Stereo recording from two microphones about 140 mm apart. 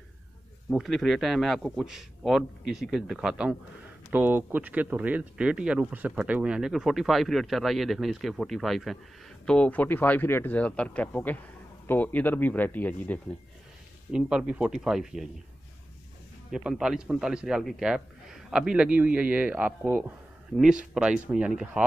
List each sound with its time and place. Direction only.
0.7 s speech: centre (ahead or behind)
14.1 s speech: 5° right (ahead or behind)
16.4 s speech: 5° right (ahead or behind)